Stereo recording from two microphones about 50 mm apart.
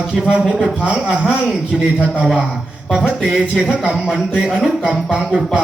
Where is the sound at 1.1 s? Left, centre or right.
Centre.